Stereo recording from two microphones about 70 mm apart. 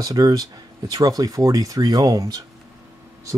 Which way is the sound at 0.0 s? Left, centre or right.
Right.